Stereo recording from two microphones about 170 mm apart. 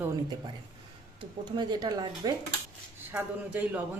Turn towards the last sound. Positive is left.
turn(degrees=-10)  # may be behind; listen again after turning